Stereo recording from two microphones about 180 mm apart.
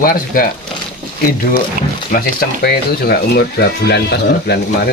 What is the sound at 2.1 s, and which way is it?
Speech, 50° left (ahead or behind).